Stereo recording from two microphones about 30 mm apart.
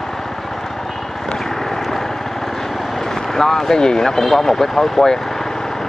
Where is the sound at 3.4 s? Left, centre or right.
Centre.